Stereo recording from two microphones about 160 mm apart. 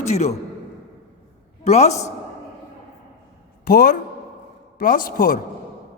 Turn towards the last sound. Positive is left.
turn(degrees=60)  # may be behind; listen again after turning